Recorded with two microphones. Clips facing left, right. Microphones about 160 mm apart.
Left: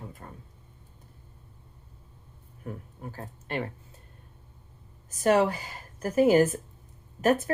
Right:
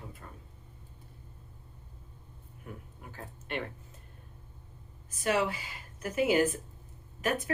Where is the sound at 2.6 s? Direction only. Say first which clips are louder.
Left 8 dB; 40° left (ahead or behind).